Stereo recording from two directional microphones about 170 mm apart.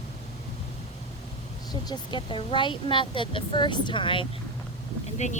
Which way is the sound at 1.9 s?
25° left (ahead or behind).